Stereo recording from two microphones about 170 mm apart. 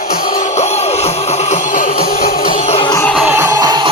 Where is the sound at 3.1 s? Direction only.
10° right (ahead or behind); by 3.9 s 25° right (ahead or behind).